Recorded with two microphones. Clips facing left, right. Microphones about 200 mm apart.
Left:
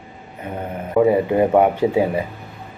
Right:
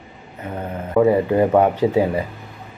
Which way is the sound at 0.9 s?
15° left (ahead or behind).